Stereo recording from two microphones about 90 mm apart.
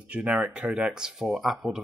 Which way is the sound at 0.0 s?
10° right (ahead or behind).